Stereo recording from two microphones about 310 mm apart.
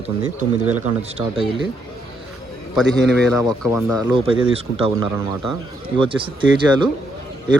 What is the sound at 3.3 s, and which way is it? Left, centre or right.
Speech, centre.